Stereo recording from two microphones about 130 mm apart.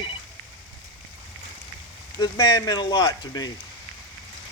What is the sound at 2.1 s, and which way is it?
Speech, 25° left (ahead or behind).